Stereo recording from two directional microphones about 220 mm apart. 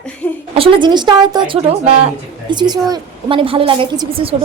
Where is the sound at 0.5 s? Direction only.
25° right (ahead or behind).